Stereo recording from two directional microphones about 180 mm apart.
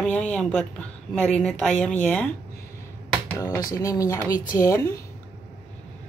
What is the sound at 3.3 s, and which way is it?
Speech, 20° left (ahead or behind).